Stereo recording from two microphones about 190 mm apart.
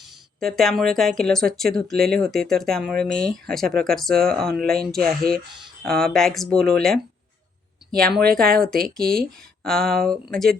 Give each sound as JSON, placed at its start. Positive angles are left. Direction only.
{"t": 0.3, "sound": "speech", "side_deg": 0}
{"t": 4.6, "sound": "speech", "side_deg": -55}
{"t": 4.9, "sound": "speech", "side_deg": 5}
{"t": 7.9, "sound": "speech", "side_deg": 0}
{"t": 8.4, "sound": "speech", "side_deg": -50}
{"t": 8.7, "sound": "speech", "side_deg": 0}